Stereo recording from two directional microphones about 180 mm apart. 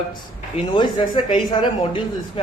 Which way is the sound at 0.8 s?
25° left (ahead or behind).